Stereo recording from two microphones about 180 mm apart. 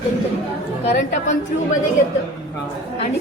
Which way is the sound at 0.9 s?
45° left (ahead or behind).